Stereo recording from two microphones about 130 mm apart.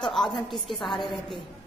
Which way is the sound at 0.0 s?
5° left (ahead or behind).